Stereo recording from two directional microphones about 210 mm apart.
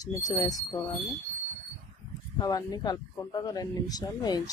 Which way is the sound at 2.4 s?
15° left (ahead or behind).